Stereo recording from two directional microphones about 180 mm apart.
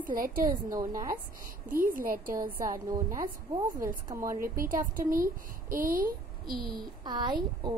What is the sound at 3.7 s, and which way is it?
Speech, 50° right (ahead or behind).